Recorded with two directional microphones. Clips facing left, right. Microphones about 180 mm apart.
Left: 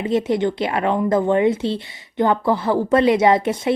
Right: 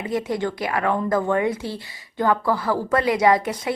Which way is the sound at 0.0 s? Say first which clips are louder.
Left 5 dB; 25° left (ahead or behind).